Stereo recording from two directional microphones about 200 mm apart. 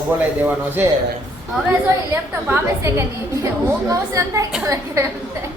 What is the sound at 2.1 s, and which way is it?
A woman's voice, 10° right (ahead or behind).